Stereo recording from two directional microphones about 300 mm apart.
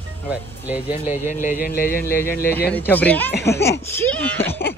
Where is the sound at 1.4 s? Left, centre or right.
Left.